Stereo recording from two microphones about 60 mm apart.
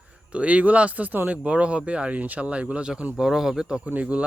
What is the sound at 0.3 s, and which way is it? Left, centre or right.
Speech, right.